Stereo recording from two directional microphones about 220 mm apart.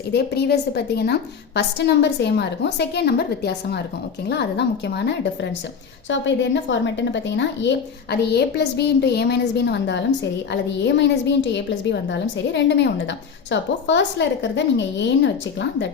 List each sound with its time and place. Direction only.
0.1 s a woman's voice: 50° left (ahead or behind)